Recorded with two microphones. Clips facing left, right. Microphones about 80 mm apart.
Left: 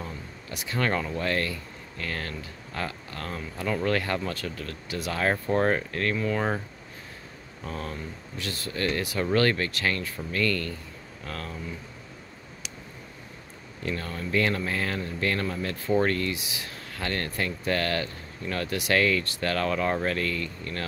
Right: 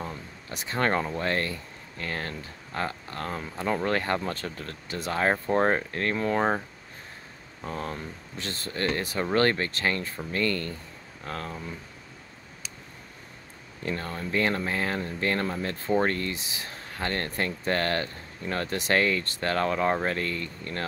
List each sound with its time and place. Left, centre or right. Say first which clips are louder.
0.0 s speech: right 1 dB; right
6.1 s speech: right 4 dB; right
7.6 s speech: right 1 dB; right
13.8 s speech: even; right